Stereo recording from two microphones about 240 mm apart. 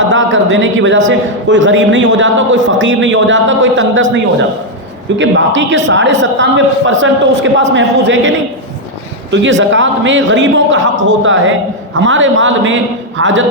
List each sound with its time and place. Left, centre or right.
0.1 s a man's voice: right
9.3 s a man's voice: right